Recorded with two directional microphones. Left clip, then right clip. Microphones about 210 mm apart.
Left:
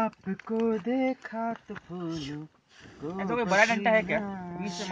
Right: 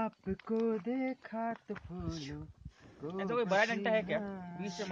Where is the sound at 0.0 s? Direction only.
5° left (ahead or behind).